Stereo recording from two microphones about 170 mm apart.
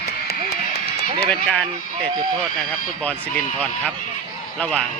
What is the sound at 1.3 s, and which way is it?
Speech, 5° left (ahead or behind).